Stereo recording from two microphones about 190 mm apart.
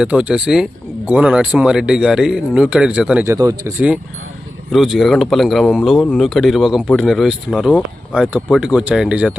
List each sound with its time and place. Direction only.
0.0 s speech: 5° right (ahead or behind)
3.3 s speech: 20° right (ahead or behind)
3.8 s speech: 5° right (ahead or behind)